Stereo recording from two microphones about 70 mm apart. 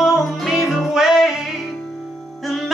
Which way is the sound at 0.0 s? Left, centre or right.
Centre.